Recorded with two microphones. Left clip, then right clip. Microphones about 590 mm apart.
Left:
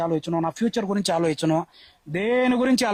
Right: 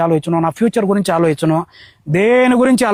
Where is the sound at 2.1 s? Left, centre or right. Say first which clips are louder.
Right 10 dB; right.